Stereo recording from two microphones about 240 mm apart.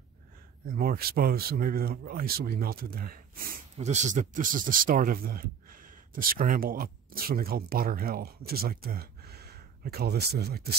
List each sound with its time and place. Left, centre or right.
0.7 s speech: right